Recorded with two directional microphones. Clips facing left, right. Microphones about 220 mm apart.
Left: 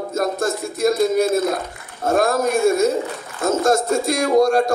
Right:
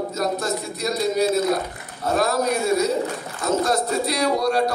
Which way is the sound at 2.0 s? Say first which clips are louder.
Left 3 dB; 50° left (ahead or behind).